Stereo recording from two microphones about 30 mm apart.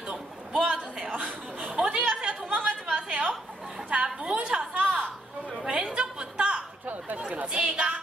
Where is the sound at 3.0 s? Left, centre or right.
Right.